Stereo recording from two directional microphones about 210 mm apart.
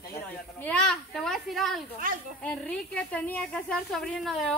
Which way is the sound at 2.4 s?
5° left (ahead or behind).